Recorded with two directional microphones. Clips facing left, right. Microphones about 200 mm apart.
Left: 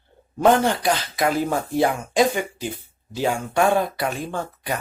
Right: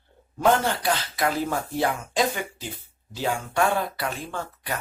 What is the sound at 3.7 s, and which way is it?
Speech, 15° left (ahead or behind).